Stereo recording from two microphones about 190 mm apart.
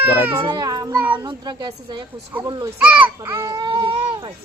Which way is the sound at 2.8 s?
10° right (ahead or behind).